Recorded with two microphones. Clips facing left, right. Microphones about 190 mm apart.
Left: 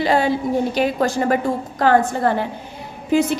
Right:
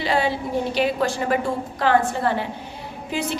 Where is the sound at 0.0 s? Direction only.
45° left (ahead or behind).